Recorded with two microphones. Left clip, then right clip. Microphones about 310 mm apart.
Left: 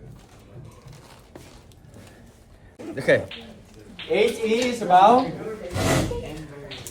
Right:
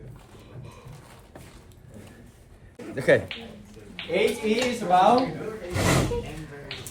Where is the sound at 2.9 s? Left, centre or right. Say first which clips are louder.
Left 1 dB; centre.